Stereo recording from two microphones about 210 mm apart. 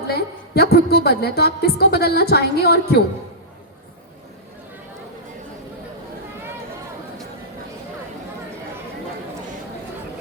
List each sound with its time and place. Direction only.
0.1 s a woman's voice: 50° left (ahead or behind)